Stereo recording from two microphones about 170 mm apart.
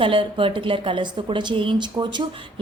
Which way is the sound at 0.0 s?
30° right (ahead or behind).